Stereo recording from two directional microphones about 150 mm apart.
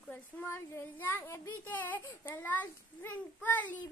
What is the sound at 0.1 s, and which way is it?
A child's voice, 15° left (ahead or behind).